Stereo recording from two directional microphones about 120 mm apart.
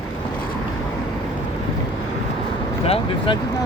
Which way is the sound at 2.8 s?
55° left (ahead or behind).